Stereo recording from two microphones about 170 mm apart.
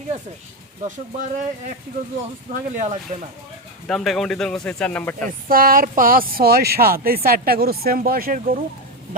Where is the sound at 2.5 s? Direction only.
50° right (ahead or behind).